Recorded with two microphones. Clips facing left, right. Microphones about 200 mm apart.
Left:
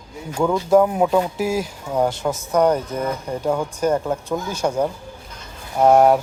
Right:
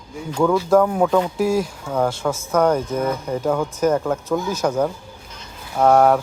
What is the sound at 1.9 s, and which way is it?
Speech, 20° left (ahead or behind).